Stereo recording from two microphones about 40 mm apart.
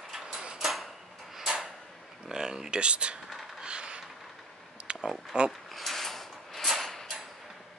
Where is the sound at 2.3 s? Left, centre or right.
Centre.